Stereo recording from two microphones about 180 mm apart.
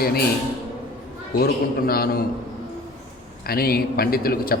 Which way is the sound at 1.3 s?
55° left (ahead or behind).